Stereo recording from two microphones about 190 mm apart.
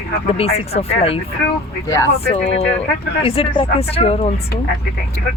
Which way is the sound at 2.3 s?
35° left (ahead or behind).